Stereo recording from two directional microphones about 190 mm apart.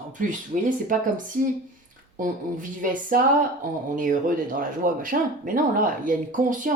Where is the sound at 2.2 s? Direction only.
45° right (ahead or behind).